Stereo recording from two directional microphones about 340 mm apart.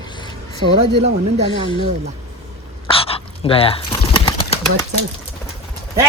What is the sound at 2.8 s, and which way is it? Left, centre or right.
Pigeon, centre.